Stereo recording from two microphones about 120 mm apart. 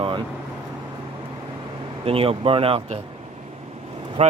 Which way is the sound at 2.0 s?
50° right (ahead or behind).